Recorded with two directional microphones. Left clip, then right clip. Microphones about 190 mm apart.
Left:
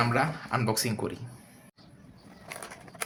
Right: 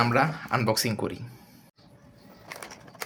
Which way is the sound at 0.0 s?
25° right (ahead or behind).